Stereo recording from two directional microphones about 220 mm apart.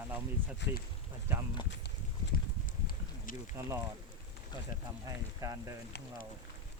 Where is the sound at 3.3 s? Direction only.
40° left (ahead or behind).